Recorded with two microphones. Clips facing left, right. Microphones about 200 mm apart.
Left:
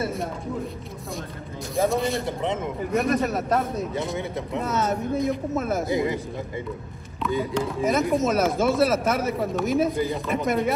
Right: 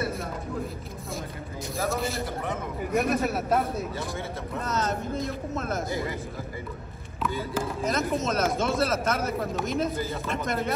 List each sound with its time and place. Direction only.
1.9 s speech: centre (ahead or behind)
2.2 s speech: 25° left (ahead or behind)
2.9 s speech: centre (ahead or behind)
3.9 s speech: 20° left (ahead or behind); by 5.9 s 5° left (ahead or behind)
5.9 s speech: 20° left (ahead or behind)
7.5 s speech: centre (ahead or behind)